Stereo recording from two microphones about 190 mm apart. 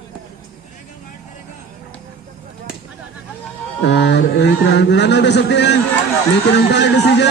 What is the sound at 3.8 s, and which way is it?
A man's voice, 65° left (ahead or behind).